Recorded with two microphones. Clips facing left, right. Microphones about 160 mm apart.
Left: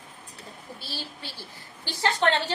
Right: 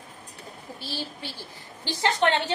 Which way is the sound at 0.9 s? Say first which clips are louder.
Right 5 dB; 15° right (ahead or behind).